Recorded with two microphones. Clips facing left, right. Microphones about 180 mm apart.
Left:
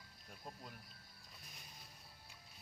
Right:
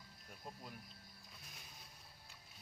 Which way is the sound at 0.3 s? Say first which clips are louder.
Even; 5° right (ahead or behind).